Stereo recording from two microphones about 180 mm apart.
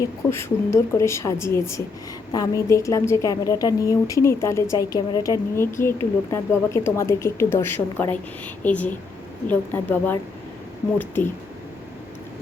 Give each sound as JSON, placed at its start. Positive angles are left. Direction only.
{"t": 0.0, "sound": "a woman's voice", "side_deg": 15}